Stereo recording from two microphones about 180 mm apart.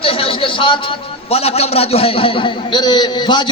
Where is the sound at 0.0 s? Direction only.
30° left (ahead or behind).